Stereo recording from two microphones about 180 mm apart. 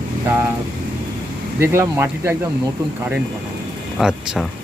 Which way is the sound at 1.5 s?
15° right (ahead or behind).